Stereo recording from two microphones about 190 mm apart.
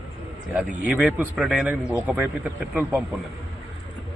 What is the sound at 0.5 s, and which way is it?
A man's voice, 5° right (ahead or behind).